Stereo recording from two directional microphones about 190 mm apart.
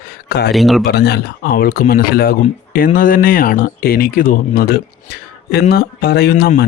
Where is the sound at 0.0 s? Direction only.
55° left (ahead or behind).